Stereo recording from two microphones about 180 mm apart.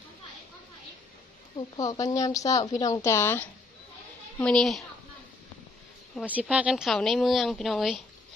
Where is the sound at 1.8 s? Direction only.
20° left (ahead or behind); by 4.8 s centre (ahead or behind).